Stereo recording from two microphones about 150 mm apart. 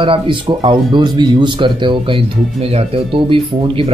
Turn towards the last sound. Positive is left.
turn(degrees=-35)  # may be behind; listen again after turning